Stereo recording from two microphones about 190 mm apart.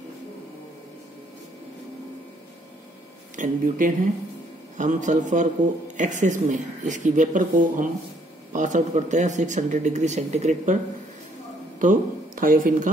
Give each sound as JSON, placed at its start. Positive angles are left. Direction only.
{"t": 3.3, "sound": "speech", "side_deg": -45}
{"t": 11.8, "sound": "speech", "side_deg": -45}